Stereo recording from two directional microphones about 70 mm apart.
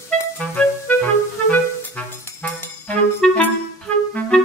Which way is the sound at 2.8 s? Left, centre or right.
Centre.